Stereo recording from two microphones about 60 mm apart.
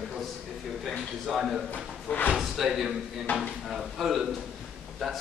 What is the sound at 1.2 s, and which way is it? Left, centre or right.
A man's voice, centre.